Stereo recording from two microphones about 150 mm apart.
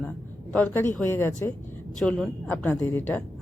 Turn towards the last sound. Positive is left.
turn(degrees=10)  # may be behind; listen again after turning